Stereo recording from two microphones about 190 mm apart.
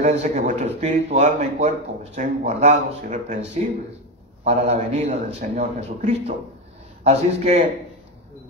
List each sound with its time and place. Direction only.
0.0 s speech: 40° right (ahead or behind)